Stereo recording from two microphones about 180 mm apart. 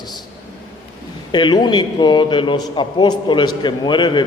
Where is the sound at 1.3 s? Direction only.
25° left (ahead or behind).